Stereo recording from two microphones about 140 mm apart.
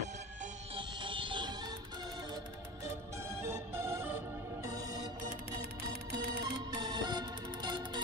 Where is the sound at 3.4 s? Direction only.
20° right (ahead or behind).